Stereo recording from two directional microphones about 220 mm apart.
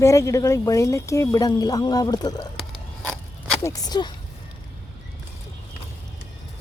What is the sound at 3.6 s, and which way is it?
Speech, 15° left (ahead or behind).